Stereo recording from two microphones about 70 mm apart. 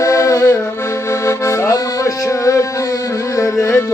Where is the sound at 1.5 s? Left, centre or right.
Left.